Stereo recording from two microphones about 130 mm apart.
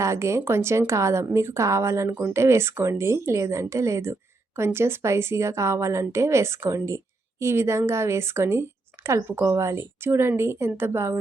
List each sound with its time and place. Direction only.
0.0 s a woman's voice: 20° right (ahead or behind)